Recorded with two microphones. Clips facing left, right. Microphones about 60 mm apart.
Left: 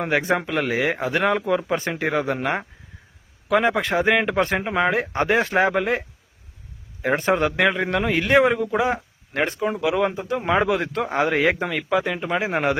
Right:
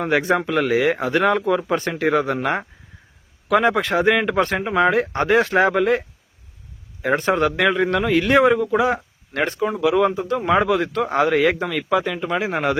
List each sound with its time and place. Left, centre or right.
0.3 s speech: centre
7.3 s a man's voice: centre
7.6 s speech: centre
7.9 s a man's voice: centre
8.1 s speech: centre
9.8 s speech: centre
12.5 s a man's voice: left